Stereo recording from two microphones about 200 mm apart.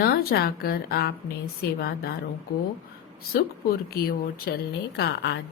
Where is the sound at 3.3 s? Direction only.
50° left (ahead or behind).